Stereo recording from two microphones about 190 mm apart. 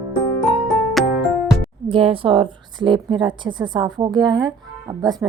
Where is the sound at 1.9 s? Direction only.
30° right (ahead or behind).